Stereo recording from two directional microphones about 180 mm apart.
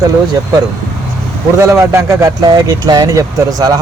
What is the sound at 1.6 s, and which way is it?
Speech, 15° right (ahead or behind).